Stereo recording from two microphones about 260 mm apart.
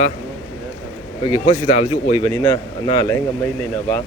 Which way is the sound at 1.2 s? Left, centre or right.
Left.